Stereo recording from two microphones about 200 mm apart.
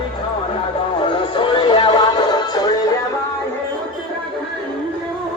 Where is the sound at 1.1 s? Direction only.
25° left (ahead or behind).